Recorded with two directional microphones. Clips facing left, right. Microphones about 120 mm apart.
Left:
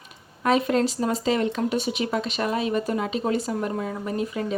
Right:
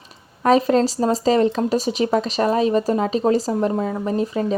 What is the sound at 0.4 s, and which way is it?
Speech, 35° right (ahead or behind).